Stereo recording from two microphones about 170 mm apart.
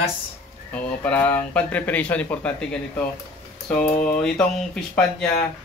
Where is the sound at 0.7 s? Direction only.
10° left (ahead or behind).